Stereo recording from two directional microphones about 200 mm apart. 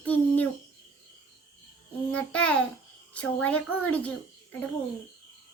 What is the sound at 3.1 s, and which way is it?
Speech, 5° left (ahead or behind).